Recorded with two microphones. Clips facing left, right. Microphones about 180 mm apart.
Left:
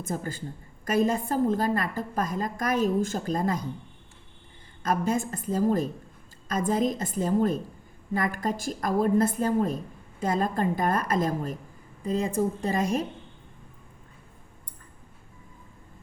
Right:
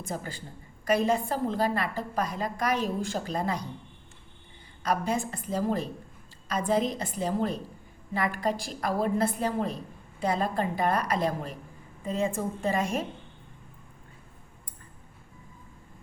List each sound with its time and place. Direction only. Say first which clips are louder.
0.1 s a woman's voice: left 4 dB; 45° left (ahead or behind)
4.8 s a woman's voice: left 2 dB; 45° left (ahead or behind)